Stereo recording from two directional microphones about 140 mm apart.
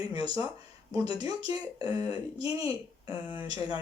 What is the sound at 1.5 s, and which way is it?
Speech, 40° left (ahead or behind).